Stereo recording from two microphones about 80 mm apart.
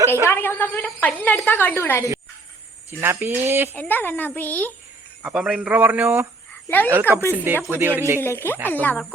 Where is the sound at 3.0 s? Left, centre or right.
Right.